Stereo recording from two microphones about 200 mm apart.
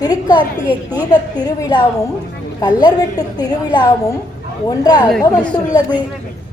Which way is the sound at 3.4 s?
20° left (ahead or behind).